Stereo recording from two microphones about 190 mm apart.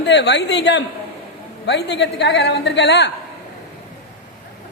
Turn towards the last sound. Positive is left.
turn(degrees=65)  # may be behind; listen again after turning